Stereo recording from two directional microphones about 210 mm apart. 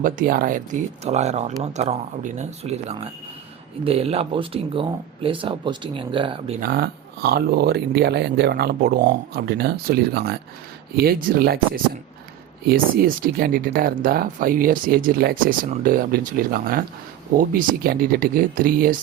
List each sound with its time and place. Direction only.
0.0 s speech: 40° right (ahead or behind); by 6.6 s 25° right (ahead or behind)
6.6 s speech: 45° right (ahead or behind)